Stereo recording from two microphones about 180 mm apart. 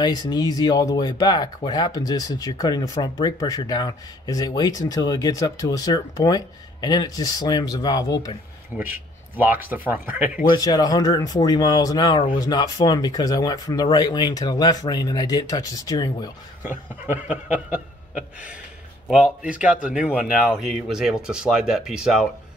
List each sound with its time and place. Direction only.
0.0 s speech: 20° left (ahead or behind)
8.7 s speech: 10° right (ahead or behind)
10.5 s speech: 20° left (ahead or behind)
17.0 s speech: 10° right (ahead or behind)